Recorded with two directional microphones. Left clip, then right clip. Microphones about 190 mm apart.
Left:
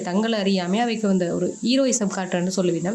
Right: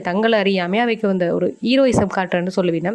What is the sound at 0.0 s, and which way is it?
Speech, 40° right (ahead or behind).